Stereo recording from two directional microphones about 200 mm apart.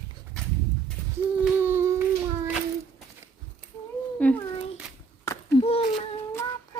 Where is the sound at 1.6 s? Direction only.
10° right (ahead or behind).